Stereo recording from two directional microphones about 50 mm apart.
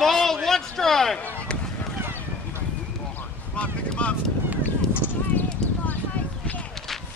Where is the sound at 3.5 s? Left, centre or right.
Left.